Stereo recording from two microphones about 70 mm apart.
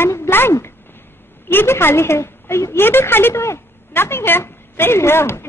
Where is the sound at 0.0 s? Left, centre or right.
Left.